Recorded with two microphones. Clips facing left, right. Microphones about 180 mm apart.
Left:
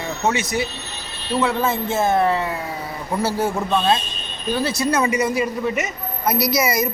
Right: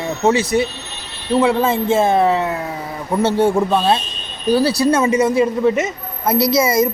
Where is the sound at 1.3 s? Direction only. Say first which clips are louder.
Right 5 dB; 30° right (ahead or behind).